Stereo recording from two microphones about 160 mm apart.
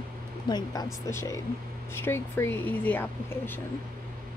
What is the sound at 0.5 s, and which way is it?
Speech, 25° left (ahead or behind).